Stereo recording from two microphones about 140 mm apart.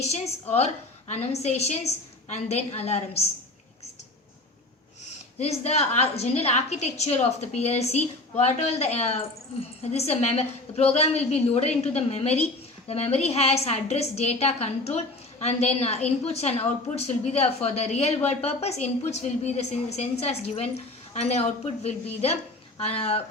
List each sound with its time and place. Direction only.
0.0 s a woman's voice: 50° left (ahead or behind)
5.0 s a woman's voice: 50° left (ahead or behind)